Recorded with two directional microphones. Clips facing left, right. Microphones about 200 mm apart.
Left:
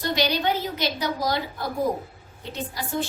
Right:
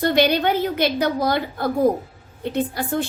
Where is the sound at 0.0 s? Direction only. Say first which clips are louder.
Right 6 dB; 55° right (ahead or behind).